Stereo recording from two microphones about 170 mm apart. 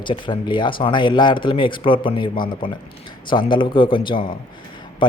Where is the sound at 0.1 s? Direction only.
25° left (ahead or behind).